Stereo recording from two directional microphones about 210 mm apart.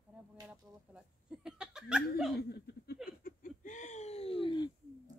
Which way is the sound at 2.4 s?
50° left (ahead or behind).